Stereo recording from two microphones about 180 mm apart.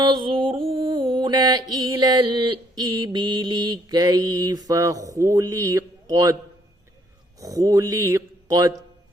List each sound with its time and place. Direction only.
0.0 s mantra: 25° right (ahead or behind)
7.3 s speech: 20° right (ahead or behind)